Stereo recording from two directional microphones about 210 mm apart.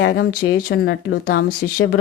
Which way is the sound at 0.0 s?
45° left (ahead or behind).